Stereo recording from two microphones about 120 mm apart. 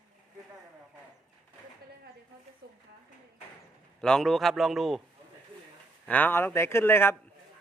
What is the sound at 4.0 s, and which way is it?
A man's voice, 5° left (ahead or behind).